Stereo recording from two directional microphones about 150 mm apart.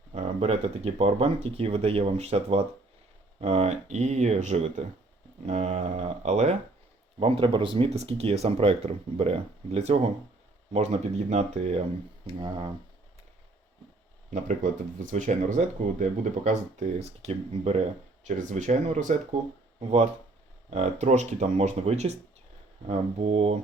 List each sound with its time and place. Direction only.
0.1 s speech: 45° right (ahead or behind)
7.2 s speech: 35° right (ahead or behind)
14.3 s speech: 55° right (ahead or behind)
20.7 s speech: 45° right (ahead or behind)